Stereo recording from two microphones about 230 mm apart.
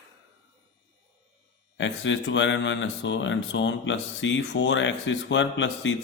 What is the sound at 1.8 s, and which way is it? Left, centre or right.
Speech, left.